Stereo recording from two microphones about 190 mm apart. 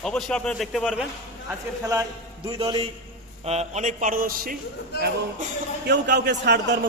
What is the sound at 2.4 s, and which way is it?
A man's voice, 30° right (ahead or behind).